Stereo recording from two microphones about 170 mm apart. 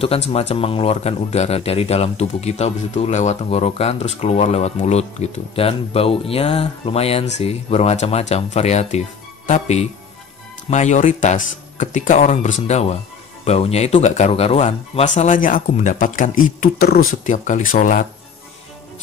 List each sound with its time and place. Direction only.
0.3 s speech: 35° left (ahead or behind)